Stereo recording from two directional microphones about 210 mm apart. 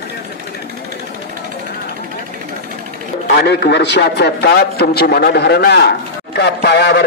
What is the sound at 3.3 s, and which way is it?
A man's voice, 50° left (ahead or behind).